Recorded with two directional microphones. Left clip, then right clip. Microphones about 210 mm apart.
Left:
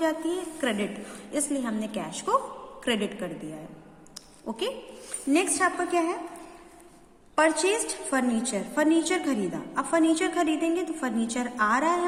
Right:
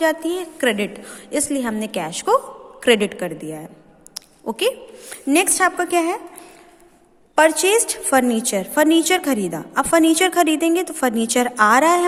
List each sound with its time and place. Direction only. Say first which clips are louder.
0.0 s a woman's voice: right 8 dB; 45° right (ahead or behind)
4.1 s a sound: right 10 dB; 45° right (ahead or behind)
5.3 s a woman's voice: right 7 dB; 50° right (ahead or behind)
7.3 s a woman's voice: right 8 dB; 45° right (ahead or behind)